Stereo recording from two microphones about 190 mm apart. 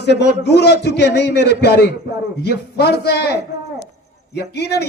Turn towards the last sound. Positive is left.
turn(degrees=60)  # may be behind; listen again after turning